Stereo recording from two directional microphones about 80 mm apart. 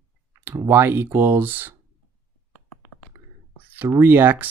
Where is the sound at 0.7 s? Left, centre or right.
Right.